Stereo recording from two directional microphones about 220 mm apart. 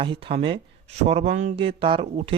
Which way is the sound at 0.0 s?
25° right (ahead or behind).